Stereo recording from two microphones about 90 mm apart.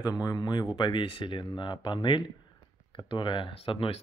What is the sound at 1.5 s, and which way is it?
Speech, 50° left (ahead or behind).